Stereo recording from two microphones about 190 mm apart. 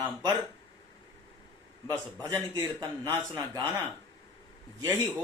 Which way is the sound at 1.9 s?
20° right (ahead or behind).